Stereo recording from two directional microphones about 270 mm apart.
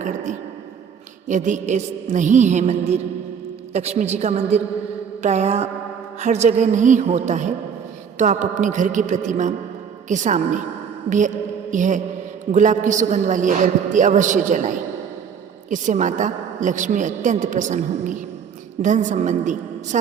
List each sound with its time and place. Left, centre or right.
1.3 s a woman's voice: right
11.7 s a woman's voice: right
15.7 s a woman's voice: right